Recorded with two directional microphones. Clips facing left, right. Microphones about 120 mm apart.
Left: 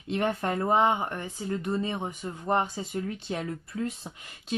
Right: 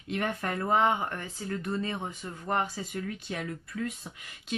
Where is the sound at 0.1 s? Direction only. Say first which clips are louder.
Left 4 dB; 30° left (ahead or behind).